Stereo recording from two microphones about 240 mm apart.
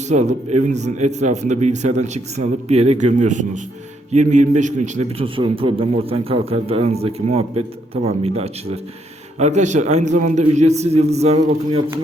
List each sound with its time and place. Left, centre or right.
0.1 s speech: right